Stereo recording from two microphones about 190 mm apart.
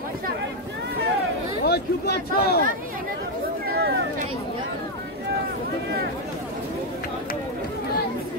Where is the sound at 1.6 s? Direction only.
55° left (ahead or behind).